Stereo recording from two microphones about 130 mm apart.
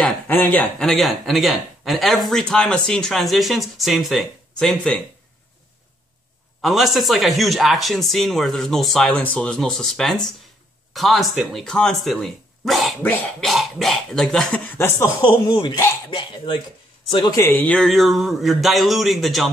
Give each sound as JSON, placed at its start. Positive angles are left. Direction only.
{"t": 0.0, "sound": "speech", "side_deg": 15}
{"t": 6.6, "sound": "a man's voice", "side_deg": 0}
{"t": 15.2, "sound": "speech", "side_deg": 40}
{"t": 17.4, "sound": "speech", "side_deg": 15}